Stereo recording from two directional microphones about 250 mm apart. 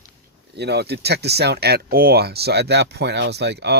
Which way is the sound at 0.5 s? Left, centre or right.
Right.